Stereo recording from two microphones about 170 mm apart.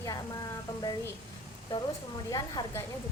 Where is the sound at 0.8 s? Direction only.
20° left (ahead or behind).